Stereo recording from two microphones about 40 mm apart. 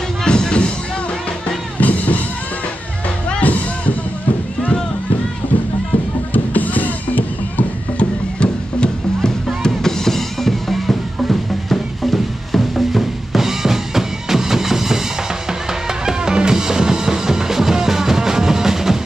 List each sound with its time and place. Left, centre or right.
0.2 s music: left
1.8 s music: left
3.3 s music: left
6.3 s music: left
8.4 s music: left; by 15.0 s centre
16.1 s music: centre